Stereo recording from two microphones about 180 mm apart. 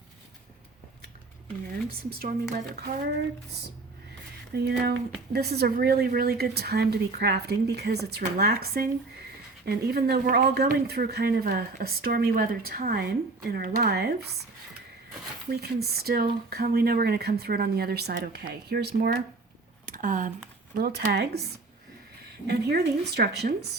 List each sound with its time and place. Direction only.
2.0 s speech: 55° right (ahead or behind)
4.5 s speech: 60° right (ahead or behind)
15.4 s speech: 60° right (ahead or behind)
19.8 s a sound: 50° right (ahead or behind)
20.7 s speech: 55° right (ahead or behind)
22.4 s speech: 65° right (ahead or behind)